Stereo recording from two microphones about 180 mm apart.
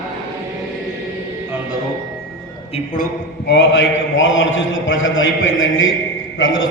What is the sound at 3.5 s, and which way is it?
A man's voice, 75° left (ahead or behind).